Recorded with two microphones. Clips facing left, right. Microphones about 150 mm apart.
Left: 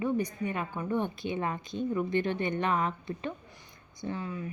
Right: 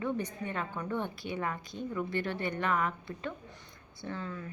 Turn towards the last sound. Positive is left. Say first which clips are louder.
# left 4 dB
turn(degrees=15)  # may be behind; listen again after turning